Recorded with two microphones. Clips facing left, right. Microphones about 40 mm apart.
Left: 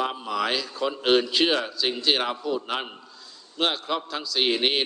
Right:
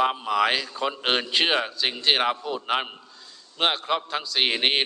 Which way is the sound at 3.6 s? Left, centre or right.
Right.